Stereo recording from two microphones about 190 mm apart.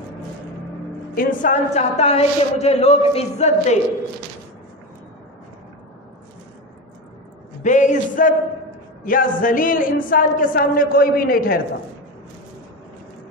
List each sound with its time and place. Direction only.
1.1 s a man's voice: 40° left (ahead or behind)
7.6 s a man's voice: 40° left (ahead or behind)